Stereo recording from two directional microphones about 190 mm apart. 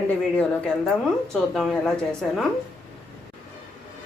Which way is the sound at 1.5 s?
Centre (ahead or behind).